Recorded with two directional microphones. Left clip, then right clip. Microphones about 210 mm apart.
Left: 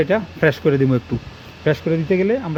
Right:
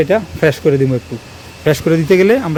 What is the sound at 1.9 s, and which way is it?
Speech, 25° right (ahead or behind).